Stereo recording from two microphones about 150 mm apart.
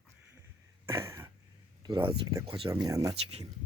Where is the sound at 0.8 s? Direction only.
20° right (ahead or behind).